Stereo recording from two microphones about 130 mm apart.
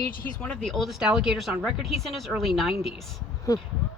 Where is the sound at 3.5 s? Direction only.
25° left (ahead or behind).